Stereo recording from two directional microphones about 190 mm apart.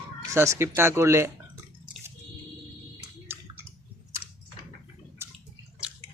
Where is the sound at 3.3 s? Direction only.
10° right (ahead or behind).